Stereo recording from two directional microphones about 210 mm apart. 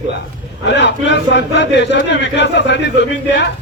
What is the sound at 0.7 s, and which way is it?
Speech, 55° left (ahead or behind).